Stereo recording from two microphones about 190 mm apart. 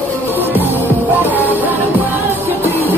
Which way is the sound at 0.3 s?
10° right (ahead or behind).